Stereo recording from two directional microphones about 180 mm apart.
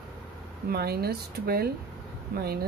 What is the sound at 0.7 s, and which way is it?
Speech, 60° right (ahead or behind).